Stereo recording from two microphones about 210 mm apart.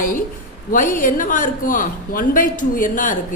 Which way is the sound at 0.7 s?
40° left (ahead or behind).